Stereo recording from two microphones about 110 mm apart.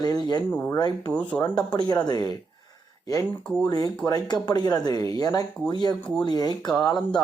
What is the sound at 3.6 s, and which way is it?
Speech, 35° left (ahead or behind).